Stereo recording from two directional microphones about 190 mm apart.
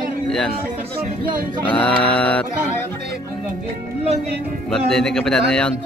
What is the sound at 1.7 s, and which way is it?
Mantra, 5° left (ahead or behind).